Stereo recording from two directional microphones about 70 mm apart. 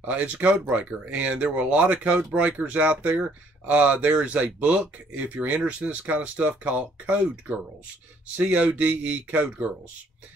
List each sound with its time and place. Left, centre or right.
0.0 s speech: right